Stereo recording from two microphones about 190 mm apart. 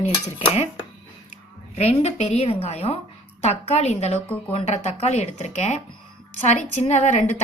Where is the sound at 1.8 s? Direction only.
35° left (ahead or behind).